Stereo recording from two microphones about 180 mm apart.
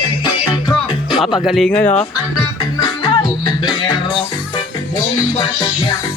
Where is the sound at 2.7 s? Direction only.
25° left (ahead or behind).